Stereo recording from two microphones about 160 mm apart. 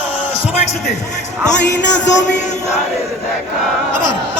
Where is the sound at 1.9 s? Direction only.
90° left.